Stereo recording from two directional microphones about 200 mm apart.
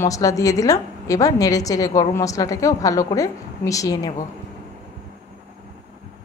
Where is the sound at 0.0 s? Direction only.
15° left (ahead or behind).